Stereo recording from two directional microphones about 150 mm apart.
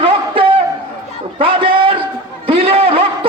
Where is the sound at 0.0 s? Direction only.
40° right (ahead or behind).